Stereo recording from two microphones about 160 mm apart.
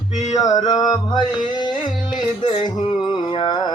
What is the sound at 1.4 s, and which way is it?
Music, 30° left (ahead or behind).